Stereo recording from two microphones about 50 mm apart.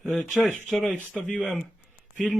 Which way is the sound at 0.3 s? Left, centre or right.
Centre.